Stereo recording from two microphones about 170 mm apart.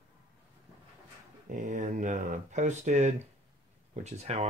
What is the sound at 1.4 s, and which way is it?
Speech, 50° right (ahead or behind).